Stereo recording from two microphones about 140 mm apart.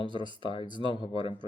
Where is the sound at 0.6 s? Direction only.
35° right (ahead or behind).